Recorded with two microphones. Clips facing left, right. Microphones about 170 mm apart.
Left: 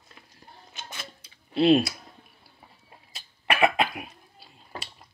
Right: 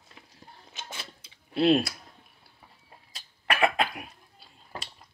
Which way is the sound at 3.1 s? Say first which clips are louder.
Left 2 dB; 5° left (ahead or behind).